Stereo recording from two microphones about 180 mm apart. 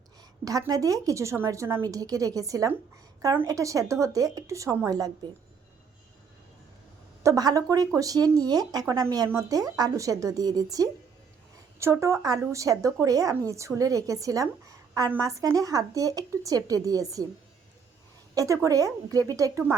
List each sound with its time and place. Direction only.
0.4 s a woman's voice: 20° right (ahead or behind)
7.2 s a woman's voice: 20° right (ahead or behind)
18.3 s a woman's voice: 20° right (ahead or behind)